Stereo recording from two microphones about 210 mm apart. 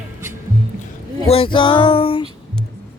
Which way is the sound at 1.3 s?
25° left (ahead or behind).